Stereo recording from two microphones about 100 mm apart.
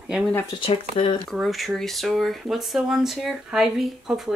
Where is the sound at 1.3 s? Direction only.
Centre (ahead or behind).